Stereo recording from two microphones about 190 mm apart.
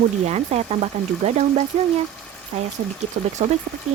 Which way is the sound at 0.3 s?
35° right (ahead or behind).